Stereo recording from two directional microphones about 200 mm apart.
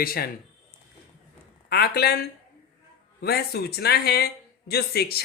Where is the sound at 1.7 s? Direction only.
50° left (ahead or behind).